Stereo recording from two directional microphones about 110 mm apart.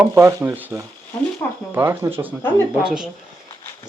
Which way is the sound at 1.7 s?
20° right (ahead or behind).